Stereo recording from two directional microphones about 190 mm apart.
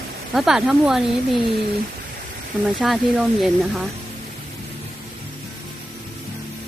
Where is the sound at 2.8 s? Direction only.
Centre (ahead or behind).